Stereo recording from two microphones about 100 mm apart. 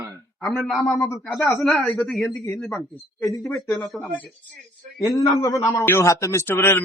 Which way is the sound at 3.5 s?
Centre (ahead or behind).